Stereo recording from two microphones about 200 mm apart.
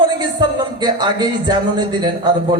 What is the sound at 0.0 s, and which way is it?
Speech, 20° right (ahead or behind).